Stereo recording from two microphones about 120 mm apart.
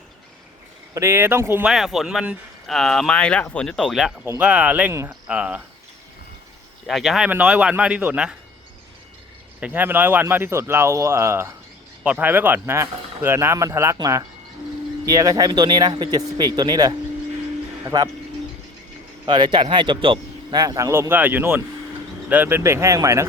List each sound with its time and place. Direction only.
0.9 s speech: 20° right (ahead or behind)
1.6 s speech: centre (ahead or behind)
2.6 s speech: 5° left (ahead or behind)
6.8 s speech: centre (ahead or behind)
9.6 s speech: 15° right (ahead or behind); by 18.1 s 35° right (ahead or behind)
19.2 s a man's voice: 40° right (ahead or behind)
20.6 s speech: 30° right (ahead or behind)